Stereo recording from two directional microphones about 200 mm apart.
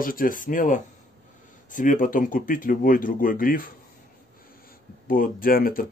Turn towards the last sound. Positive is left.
turn(degrees=45)  # may be behind; listen again after turning